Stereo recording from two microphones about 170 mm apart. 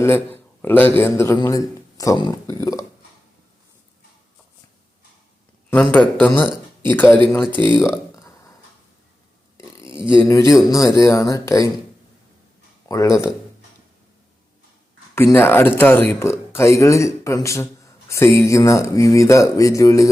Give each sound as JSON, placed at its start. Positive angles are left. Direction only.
{"t": 0.0, "sound": "speech", "side_deg": 15}
{"t": 5.7, "sound": "speech", "side_deg": 10}
{"t": 7.3, "sound": "speech", "side_deg": 0}
{"t": 7.5, "sound": "speech", "side_deg": -30}
{"t": 7.9, "sound": "a sound", "side_deg": 20}
{"t": 10.2, "sound": "speech", "side_deg": 20}
{"t": 12.9, "sound": "speech", "side_deg": 20}
{"t": 15.1, "sound": "speech", "side_deg": 15}